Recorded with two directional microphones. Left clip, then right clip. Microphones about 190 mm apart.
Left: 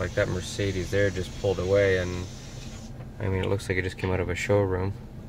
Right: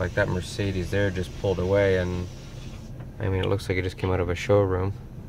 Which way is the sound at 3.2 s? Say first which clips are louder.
Right 2 dB; 10° right (ahead or behind).